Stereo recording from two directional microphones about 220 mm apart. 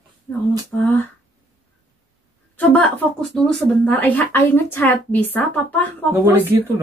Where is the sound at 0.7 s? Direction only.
10° left (ahead or behind).